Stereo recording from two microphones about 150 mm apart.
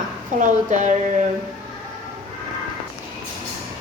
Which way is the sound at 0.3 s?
55° right (ahead or behind).